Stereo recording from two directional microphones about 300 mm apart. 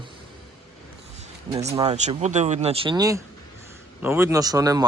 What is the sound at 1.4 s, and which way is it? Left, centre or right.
A man's voice, centre.